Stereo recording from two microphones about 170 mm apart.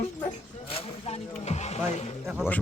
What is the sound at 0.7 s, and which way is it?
Vehicle, 35° left (ahead or behind).